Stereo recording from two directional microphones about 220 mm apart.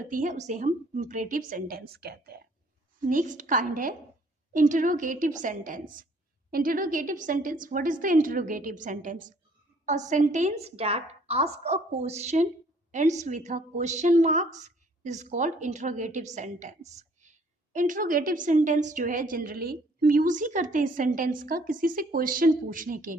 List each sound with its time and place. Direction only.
0.0 s a woman's voice: 35° right (ahead or behind)
3.0 s a woman's voice: 35° right (ahead or behind)